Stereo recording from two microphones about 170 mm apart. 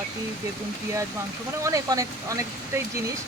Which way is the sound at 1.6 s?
20° right (ahead or behind).